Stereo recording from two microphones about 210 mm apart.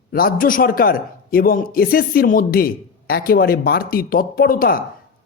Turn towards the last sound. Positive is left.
turn(degrees=45)  # may be behind; listen again after turning